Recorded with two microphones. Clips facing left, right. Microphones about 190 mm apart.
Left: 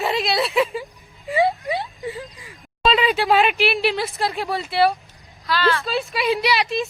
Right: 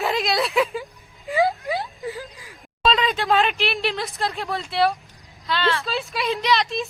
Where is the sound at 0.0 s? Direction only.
Centre (ahead or behind).